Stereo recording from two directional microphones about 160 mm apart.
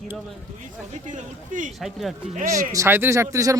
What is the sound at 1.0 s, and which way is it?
Speech, 50° right (ahead or behind).